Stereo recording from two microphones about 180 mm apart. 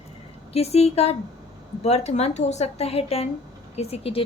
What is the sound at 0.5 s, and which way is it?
Speech, 35° left (ahead or behind).